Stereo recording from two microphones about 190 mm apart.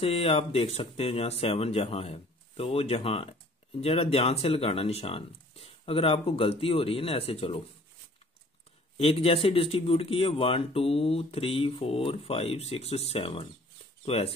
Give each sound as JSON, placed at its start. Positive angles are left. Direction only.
{"t": 0.0, "sound": "speech", "side_deg": 30}
{"t": 8.9, "sound": "speech", "side_deg": 30}